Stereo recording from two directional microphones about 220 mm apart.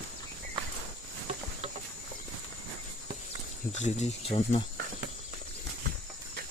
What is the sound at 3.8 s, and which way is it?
Speech, 30° left (ahead or behind).